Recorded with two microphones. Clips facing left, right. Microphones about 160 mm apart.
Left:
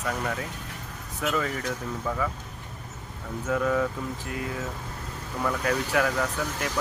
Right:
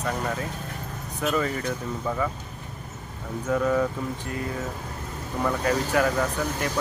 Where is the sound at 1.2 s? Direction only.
Centre (ahead or behind).